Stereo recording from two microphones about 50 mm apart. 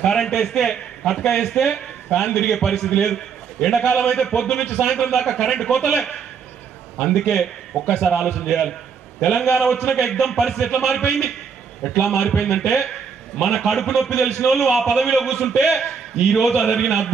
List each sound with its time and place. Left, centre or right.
0.0 s a man's voice: centre
12.4 s a man's voice: centre